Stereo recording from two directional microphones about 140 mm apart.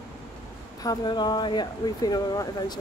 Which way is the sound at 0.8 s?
30° left (ahead or behind).